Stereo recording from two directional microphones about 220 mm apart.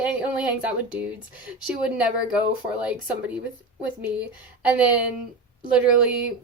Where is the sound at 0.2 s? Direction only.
5° right (ahead or behind).